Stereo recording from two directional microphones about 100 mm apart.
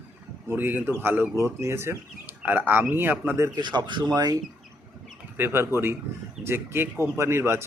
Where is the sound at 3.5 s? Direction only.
50° right (ahead or behind).